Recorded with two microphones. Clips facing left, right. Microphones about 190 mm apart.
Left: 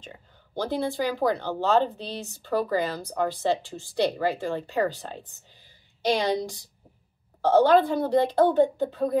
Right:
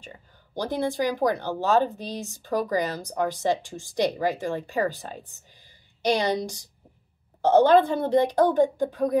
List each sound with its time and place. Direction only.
0.6 s speech: 15° right (ahead or behind)
5.5 s a sound: 15° right (ahead or behind)
7.4 s speech: 20° right (ahead or behind)